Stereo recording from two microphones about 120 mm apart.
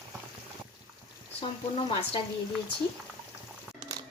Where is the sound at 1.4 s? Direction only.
50° left (ahead or behind).